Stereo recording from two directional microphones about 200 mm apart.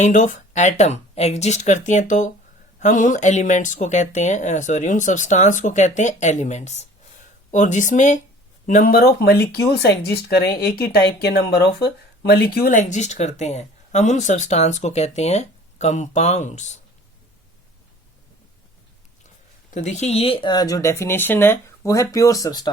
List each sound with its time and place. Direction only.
0.0 s speech: 40° left (ahead or behind)
19.7 s speech: 35° left (ahead or behind); by 22.7 s 20° left (ahead or behind)